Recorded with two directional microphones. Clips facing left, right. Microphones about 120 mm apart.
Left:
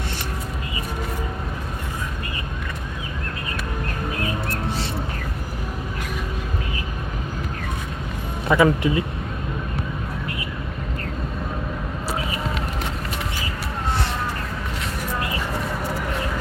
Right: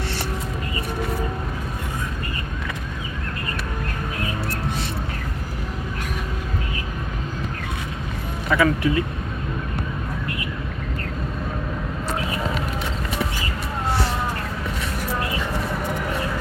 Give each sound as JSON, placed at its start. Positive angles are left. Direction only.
{"t": 8.4, "sound": "speech", "side_deg": 20}